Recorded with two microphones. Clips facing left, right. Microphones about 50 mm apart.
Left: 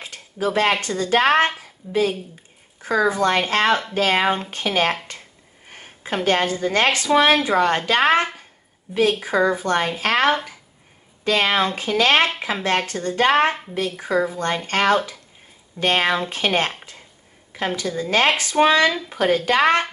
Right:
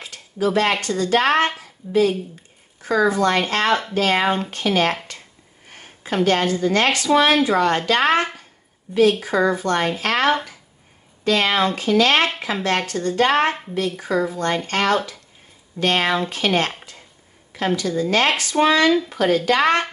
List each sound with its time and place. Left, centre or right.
0.0 s a woman's voice: left
4.2 s speech: centre
4.5 s speech: left
8.9 s a woman's voice: centre
9.2 s speech: centre
17.7 s speech: centre
18.9 s speech: centre
19.1 s speech: left